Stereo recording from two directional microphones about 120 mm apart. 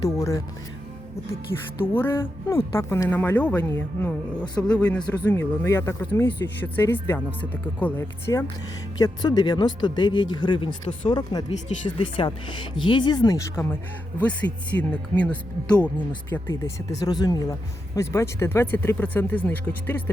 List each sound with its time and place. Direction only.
0.0 s speech: 25° left (ahead or behind)
1.8 s speech: 15° left (ahead or behind)
9.0 s speech: 35° left (ahead or behind)
14.2 s speech: 10° left (ahead or behind)
16.3 s speech: 25° left (ahead or behind)